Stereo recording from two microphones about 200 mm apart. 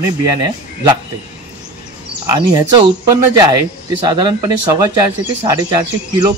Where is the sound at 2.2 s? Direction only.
20° right (ahead or behind).